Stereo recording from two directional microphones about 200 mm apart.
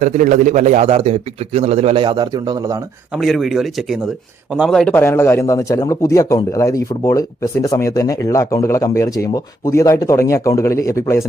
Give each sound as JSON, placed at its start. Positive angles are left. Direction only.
{"t": 0.0, "sound": "a man's voice", "side_deg": -40}
{"t": 3.2, "sound": "a man's voice", "side_deg": 0}